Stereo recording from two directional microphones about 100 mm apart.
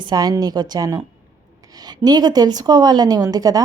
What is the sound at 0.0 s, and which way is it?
A woman's voice, 45° right (ahead or behind).